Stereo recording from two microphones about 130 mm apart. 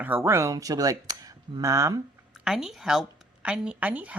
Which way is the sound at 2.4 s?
5° right (ahead or behind).